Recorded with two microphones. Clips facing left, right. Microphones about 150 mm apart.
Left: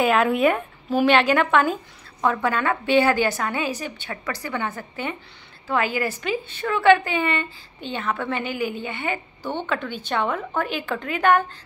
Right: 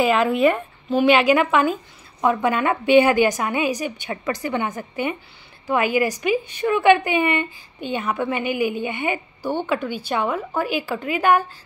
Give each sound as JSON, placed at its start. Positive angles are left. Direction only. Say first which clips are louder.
{"t": 0.0, "sound": "a woman's voice", "louder": "right 1 dB", "side_deg": 0}